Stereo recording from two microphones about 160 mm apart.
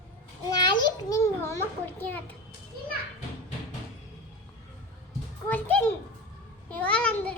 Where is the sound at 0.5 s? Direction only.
25° left (ahead or behind).